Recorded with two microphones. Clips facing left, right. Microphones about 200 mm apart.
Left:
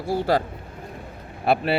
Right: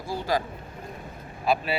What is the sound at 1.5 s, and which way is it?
Speech, 65° left (ahead or behind).